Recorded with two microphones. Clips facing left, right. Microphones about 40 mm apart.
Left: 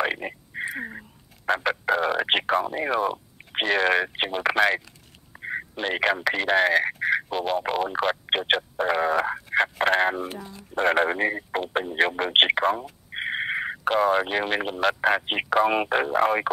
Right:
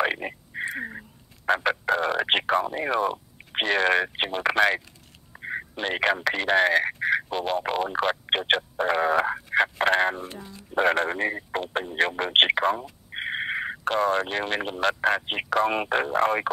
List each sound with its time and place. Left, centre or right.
0.0 s speech: centre